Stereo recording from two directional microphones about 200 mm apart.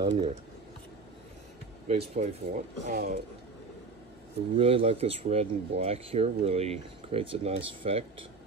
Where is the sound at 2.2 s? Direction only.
40° right (ahead or behind).